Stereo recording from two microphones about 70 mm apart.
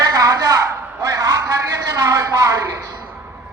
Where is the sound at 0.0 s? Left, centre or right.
Right.